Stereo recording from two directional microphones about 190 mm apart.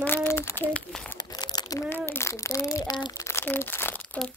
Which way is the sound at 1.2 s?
20° left (ahead or behind).